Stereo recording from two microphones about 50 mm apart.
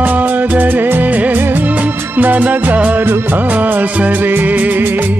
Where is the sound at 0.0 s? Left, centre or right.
Right.